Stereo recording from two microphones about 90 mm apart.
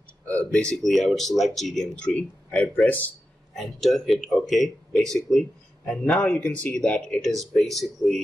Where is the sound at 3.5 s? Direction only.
Centre (ahead or behind).